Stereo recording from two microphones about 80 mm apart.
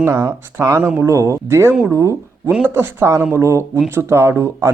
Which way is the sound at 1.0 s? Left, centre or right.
Right.